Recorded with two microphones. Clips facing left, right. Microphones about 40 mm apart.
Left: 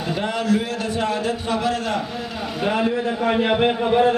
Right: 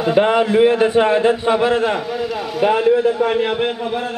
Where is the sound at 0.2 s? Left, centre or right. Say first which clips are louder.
Right 9 dB; right.